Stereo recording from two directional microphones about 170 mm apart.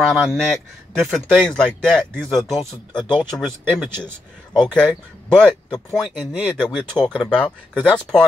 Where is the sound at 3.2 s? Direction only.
Centre (ahead or behind).